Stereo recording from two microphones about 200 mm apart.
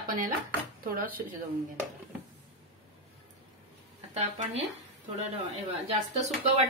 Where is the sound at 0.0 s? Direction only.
45° right (ahead or behind).